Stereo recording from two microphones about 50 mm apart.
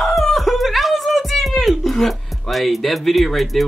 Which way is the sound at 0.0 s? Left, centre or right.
Centre.